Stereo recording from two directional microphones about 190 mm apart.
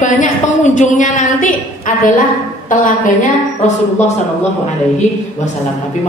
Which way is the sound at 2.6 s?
45° left (ahead or behind).